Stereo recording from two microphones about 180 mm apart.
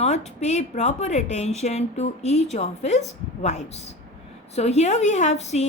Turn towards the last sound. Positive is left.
turn(degrees=40)  # may be behind; listen again after turning